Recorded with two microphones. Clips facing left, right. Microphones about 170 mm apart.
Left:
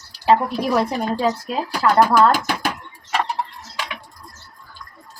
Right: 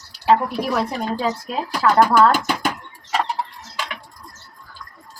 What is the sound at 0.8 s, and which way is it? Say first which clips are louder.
Speech: left 2 dB; 5° left (ahead or behind).